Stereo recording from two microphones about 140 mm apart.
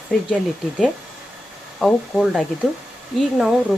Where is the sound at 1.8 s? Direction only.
5° left (ahead or behind).